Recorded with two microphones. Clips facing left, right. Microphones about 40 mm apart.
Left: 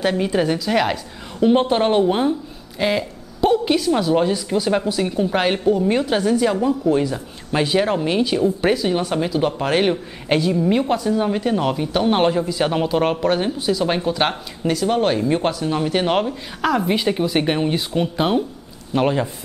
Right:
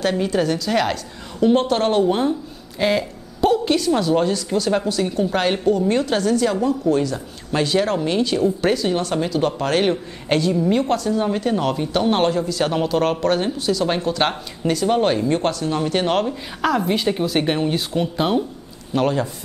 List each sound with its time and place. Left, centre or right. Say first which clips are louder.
0.0 s a woman's voice: left 1 dB; centre